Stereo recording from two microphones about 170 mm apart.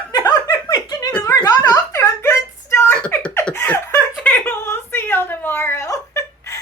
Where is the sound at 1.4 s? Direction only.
20° left (ahead or behind).